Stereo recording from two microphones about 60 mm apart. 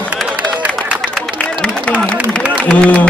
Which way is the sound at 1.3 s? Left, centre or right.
Centre.